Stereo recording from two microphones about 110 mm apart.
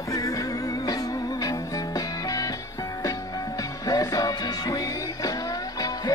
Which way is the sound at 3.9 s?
35° left (ahead or behind).